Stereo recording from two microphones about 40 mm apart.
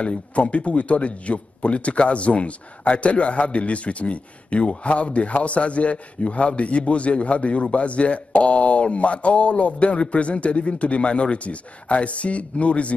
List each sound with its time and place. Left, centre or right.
0.0 s speech: left